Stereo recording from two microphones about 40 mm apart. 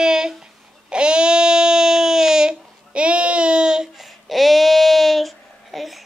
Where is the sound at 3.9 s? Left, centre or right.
Centre.